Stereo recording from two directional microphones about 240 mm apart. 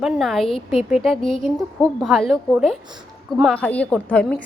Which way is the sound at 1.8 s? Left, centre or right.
Centre.